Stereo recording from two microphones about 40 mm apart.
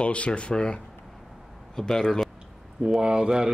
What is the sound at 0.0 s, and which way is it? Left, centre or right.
Speech, left.